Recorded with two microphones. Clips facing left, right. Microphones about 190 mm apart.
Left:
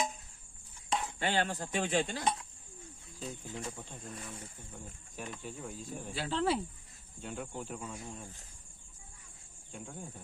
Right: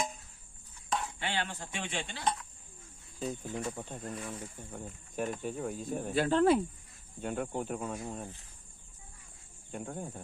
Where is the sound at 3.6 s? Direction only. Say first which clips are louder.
Right 5 dB; 50° right (ahead or behind).